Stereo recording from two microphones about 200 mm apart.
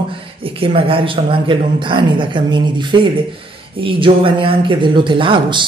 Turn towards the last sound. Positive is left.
turn(degrees=-25)  # may be behind; listen again after turning